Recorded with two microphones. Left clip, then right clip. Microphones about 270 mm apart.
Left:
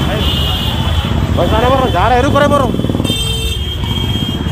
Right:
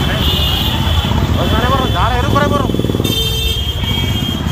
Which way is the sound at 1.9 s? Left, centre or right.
Left.